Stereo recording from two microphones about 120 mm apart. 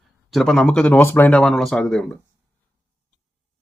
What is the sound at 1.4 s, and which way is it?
Speech, centre (ahead or behind).